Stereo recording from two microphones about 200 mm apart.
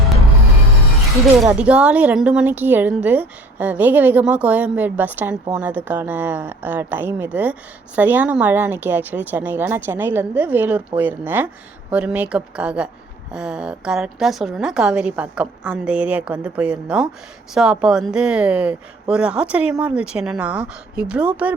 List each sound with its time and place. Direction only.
1.5 s a woman's voice: 5° right (ahead or behind)